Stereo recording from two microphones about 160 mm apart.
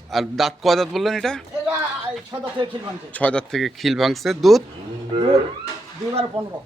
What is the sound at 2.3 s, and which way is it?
Speech, 25° right (ahead or behind).